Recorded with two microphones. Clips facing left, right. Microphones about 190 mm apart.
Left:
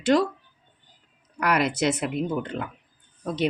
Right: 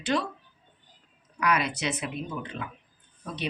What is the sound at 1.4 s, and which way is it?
Speech, 70° left (ahead or behind).